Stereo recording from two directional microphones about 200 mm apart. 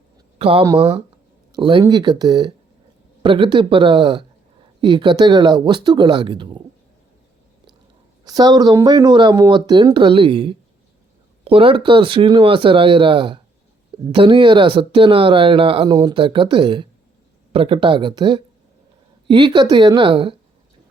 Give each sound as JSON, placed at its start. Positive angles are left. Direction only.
{"t": 0.3, "sound": "speech", "side_deg": -30}
{"t": 8.2, "sound": "speech", "side_deg": -20}